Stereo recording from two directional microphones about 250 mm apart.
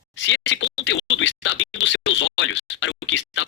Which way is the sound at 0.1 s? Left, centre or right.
Left.